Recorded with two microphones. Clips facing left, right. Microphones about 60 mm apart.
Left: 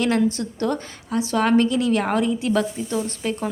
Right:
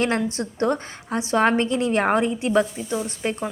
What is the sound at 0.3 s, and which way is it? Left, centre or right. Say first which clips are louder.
A woman's voice: right 1 dB; right.